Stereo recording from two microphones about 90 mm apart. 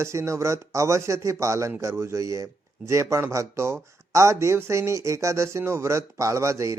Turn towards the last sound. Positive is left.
turn(degrees=-35)  # may be behind; listen again after turning